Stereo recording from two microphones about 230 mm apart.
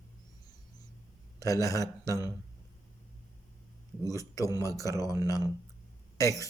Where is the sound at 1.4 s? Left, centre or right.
Centre.